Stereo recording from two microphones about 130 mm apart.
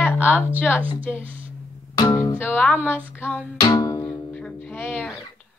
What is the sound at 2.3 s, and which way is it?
Music, 15° left (ahead or behind).